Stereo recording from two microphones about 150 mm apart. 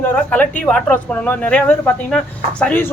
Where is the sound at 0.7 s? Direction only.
5° left (ahead or behind).